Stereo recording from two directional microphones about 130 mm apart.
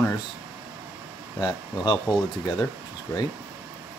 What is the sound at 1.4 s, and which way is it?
Speech, 35° left (ahead or behind).